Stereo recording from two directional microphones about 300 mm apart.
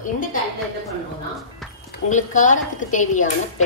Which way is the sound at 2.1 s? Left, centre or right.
Left.